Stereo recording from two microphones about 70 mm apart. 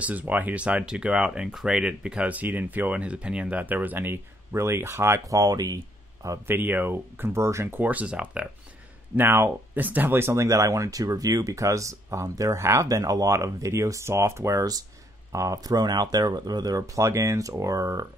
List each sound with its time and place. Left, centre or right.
0.0 s speech: right
5.2 s speech: right
6.4 s speech: right
7.7 s speech: right
9.1 s speech: right